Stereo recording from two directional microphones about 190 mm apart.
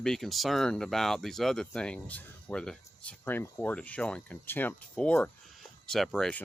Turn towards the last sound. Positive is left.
turn(degrees=0)  # may be behind; listen again after turning